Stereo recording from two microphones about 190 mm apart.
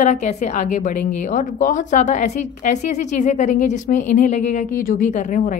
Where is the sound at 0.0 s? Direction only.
40° left (ahead or behind).